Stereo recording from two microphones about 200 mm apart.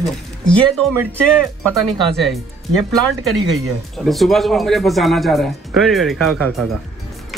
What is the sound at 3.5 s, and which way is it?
Speech, centre (ahead or behind).